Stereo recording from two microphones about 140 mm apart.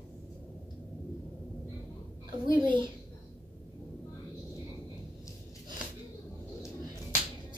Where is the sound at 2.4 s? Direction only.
35° right (ahead or behind).